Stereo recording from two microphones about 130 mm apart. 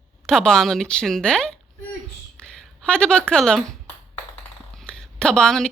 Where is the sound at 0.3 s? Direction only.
5° left (ahead or behind).